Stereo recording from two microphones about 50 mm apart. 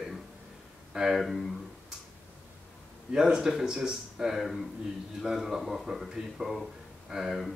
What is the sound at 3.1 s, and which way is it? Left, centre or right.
Speech, centre.